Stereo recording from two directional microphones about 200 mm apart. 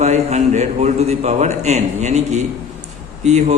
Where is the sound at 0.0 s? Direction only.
35° right (ahead or behind).